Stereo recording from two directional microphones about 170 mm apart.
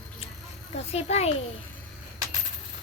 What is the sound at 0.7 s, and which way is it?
Speech, 40° left (ahead or behind).